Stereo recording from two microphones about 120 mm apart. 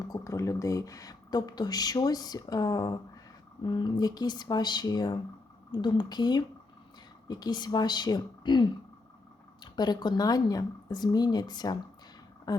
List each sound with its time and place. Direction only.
0.1 s speech: 25° left (ahead or behind)
9.7 s speech: 35° left (ahead or behind)